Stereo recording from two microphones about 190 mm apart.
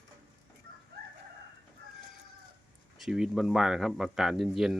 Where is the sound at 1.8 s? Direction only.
50° right (ahead or behind).